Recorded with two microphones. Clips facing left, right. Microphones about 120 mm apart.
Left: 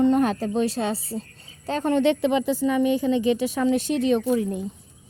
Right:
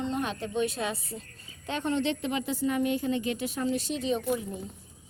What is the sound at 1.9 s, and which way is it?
Speech, 55° left (ahead or behind).